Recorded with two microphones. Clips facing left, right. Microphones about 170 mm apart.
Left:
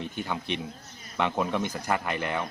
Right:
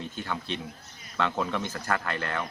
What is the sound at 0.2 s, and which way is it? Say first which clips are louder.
Speech: left 2 dB; 15° left (ahead or behind).